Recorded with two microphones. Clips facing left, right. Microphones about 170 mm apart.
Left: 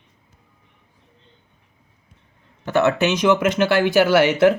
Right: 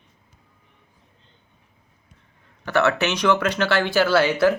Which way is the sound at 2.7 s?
20° left (ahead or behind).